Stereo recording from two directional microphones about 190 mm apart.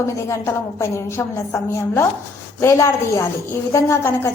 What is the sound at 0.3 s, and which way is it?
A woman's voice, 15° left (ahead or behind).